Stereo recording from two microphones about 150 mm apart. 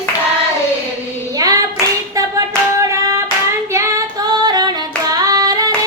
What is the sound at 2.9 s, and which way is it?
Child singing, 20° right (ahead or behind).